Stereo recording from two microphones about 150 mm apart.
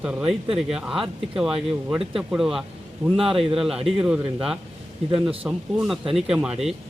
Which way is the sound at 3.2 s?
40° right (ahead or behind).